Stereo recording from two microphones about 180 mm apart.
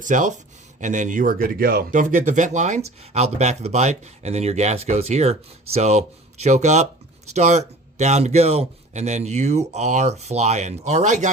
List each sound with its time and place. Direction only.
0.0 s speech: 45° right (ahead or behind)